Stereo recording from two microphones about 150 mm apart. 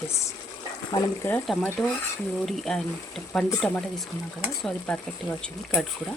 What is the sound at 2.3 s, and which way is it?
Speech, centre (ahead or behind).